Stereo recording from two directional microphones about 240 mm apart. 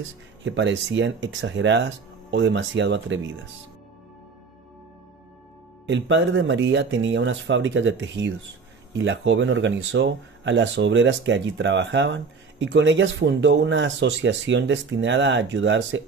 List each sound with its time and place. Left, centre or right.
0.4 s speech: right
5.9 s speech: right